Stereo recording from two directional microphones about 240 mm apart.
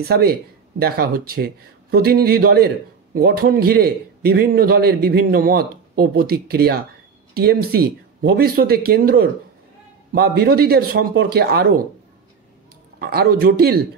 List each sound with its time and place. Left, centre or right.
0.1 s a man's voice: right
13.0 s a man's voice: right